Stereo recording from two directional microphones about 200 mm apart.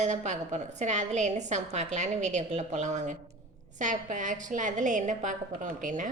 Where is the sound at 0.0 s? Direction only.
35° right (ahead or behind).